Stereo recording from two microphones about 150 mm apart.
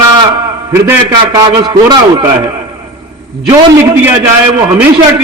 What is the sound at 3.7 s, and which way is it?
Speech, 15° right (ahead or behind).